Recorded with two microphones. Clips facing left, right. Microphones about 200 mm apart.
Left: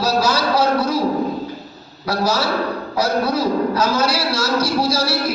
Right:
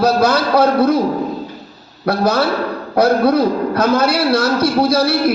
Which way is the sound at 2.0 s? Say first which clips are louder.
Right 5 dB; 55° right (ahead or behind).